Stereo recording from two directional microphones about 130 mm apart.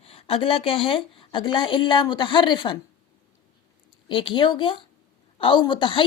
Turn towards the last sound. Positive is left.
turn(degrees=40)  # may be behind; listen again after turning